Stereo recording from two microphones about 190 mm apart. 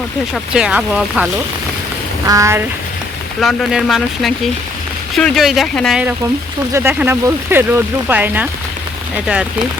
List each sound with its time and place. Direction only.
0.5 s speech: 5° right (ahead or behind)
2.2 s speech: 15° right (ahead or behind)
3.4 s speech: centre (ahead or behind)